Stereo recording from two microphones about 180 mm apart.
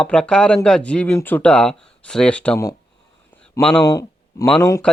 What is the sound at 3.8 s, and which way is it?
Speech, 15° left (ahead or behind).